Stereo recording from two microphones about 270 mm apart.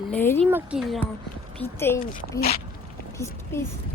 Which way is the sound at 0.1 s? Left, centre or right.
Centre.